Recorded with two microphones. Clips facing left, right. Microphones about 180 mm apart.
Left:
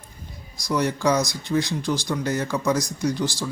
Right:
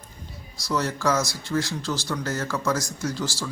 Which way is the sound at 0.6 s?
15° left (ahead or behind).